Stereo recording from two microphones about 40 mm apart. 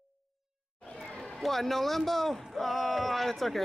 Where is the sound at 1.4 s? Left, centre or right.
Centre.